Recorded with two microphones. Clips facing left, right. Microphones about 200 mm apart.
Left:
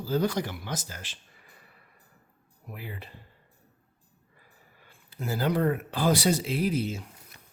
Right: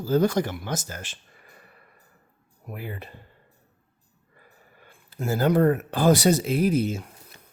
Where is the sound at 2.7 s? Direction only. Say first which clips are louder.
Right 5 dB; 50° right (ahead or behind).